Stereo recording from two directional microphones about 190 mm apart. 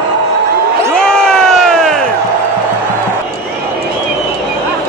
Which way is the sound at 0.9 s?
5° left (ahead or behind).